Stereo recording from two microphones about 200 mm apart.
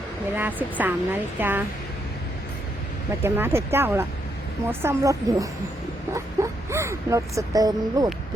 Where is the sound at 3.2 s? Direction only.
10° right (ahead or behind).